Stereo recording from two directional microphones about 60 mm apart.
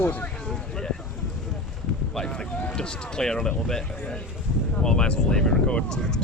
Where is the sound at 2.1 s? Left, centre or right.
Centre.